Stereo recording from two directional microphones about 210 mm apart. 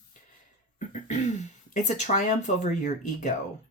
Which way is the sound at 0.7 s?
35° left (ahead or behind).